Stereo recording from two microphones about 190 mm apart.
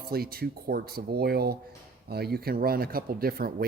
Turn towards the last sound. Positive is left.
turn(degrees=-50)  # may be behind; listen again after turning